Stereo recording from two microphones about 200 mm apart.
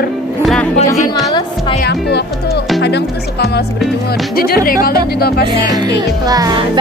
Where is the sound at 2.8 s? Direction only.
55° left (ahead or behind).